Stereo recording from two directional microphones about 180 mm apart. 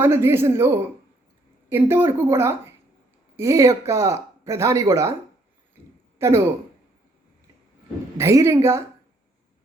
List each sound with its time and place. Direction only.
0.0 s speech: 15° right (ahead or behind)
1.7 s speech: 10° right (ahead or behind)
6.1 s speech: 15° right (ahead or behind)
8.2 s speech: 15° right (ahead or behind)